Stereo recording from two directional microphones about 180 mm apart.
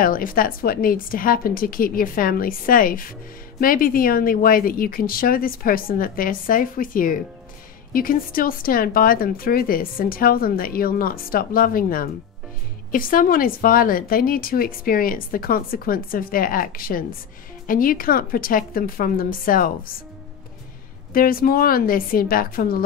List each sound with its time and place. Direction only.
0.0 s speech: 50° left (ahead or behind)
21.1 s speech: 55° left (ahead or behind)